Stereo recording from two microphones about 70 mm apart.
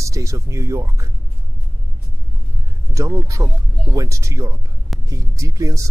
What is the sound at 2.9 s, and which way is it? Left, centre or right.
Speech, right.